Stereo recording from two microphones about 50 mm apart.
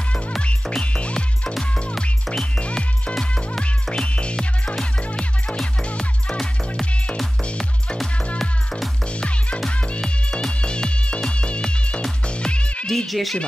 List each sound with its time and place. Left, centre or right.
0.4 s music: left
2.0 s music: centre
2.6 s music: left
8.4 s music: centre
9.7 s music: left
12.8 s music: centre